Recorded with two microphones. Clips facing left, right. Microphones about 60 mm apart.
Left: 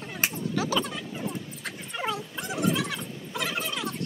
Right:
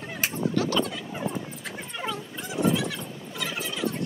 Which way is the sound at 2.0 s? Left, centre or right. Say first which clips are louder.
Left 2 dB; centre.